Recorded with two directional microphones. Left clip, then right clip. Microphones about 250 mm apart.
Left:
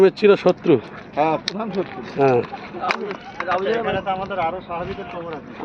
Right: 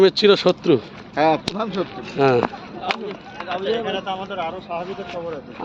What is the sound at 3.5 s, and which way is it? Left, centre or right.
Speech, centre.